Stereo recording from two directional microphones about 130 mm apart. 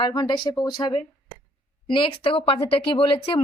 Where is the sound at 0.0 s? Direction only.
35° left (ahead or behind).